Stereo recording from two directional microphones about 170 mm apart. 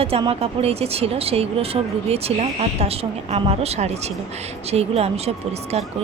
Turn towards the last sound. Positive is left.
turn(degrees=-40)  # may be behind; listen again after turning